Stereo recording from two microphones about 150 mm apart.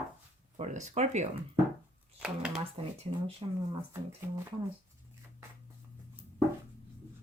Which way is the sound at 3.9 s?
15° right (ahead or behind).